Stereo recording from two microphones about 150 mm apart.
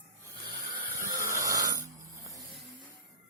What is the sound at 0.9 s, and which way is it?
Snoring, 20° right (ahead or behind).